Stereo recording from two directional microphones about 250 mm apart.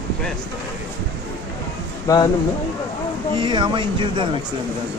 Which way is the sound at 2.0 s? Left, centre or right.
Centre.